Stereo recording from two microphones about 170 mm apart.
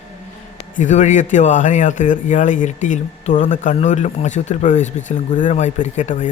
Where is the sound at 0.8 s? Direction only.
45° left (ahead or behind).